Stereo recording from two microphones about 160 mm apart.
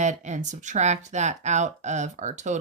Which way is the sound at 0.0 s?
50° right (ahead or behind).